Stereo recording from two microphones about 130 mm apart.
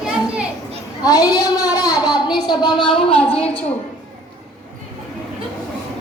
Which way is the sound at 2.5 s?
35° left (ahead or behind).